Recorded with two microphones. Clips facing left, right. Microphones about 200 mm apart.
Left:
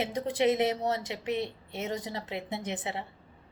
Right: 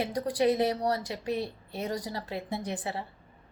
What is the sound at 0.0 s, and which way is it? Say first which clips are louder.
Speech: right 1 dB; 25° left (ahead or behind).